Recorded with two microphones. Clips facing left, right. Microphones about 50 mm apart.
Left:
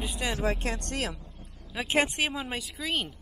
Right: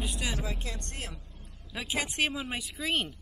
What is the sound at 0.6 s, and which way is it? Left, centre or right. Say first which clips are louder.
Speech: left 8 dB; left.